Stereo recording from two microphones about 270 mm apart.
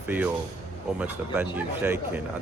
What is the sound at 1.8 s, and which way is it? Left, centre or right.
Speech, centre.